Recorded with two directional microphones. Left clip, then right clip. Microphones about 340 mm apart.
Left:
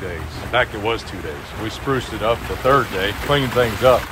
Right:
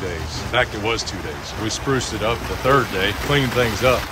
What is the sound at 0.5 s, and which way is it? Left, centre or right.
Speech, centre.